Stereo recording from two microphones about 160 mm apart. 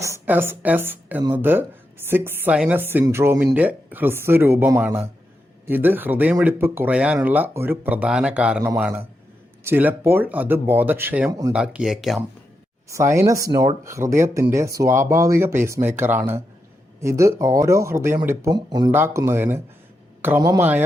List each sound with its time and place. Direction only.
0.0 s speech: 15° right (ahead or behind)
11.3 s speech: 20° right (ahead or behind)
11.5 s speech: 5° right (ahead or behind)
12.9 s speech: 20° right (ahead or behind)
18.9 s speech: 15° right (ahead or behind)